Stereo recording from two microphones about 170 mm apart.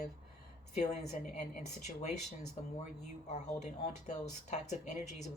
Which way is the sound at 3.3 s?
40° left (ahead or behind).